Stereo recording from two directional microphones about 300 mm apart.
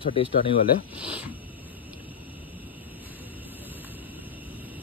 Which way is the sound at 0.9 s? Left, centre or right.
Centre.